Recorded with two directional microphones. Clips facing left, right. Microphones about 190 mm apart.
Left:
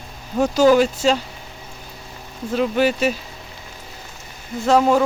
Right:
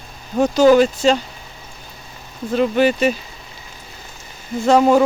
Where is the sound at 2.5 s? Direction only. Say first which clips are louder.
Right 3 dB; centre (ahead or behind).